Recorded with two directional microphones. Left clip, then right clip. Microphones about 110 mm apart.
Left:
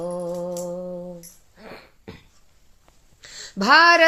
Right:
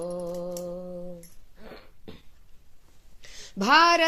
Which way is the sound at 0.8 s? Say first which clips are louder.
Left 6 dB; 55° right (ahead or behind).